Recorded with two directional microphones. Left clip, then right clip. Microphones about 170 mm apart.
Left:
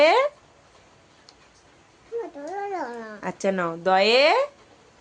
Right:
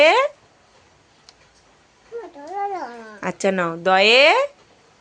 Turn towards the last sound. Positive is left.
turn(degrees=-20)  # may be behind; listen again after turning